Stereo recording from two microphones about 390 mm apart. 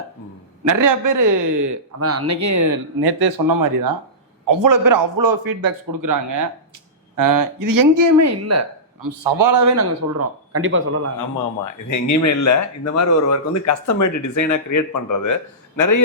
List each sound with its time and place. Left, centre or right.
0.6 s speech: right
2.0 s speech: right
3.0 s speech: right
4.4 s speech: right
11.9 s speech: left